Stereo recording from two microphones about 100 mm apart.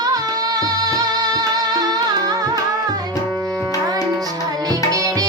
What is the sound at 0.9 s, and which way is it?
Music, 40° right (ahead or behind).